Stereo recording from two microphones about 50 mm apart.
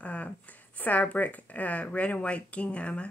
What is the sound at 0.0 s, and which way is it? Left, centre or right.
Speech, left.